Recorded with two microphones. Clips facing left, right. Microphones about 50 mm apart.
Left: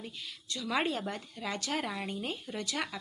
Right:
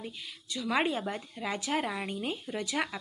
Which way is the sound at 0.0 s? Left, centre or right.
Centre.